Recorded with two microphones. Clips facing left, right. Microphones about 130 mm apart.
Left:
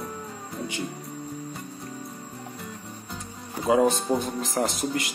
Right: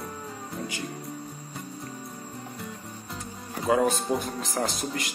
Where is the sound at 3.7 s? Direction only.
20° left (ahead or behind).